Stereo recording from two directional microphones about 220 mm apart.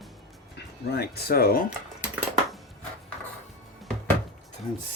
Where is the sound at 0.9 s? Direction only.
45° left (ahead or behind).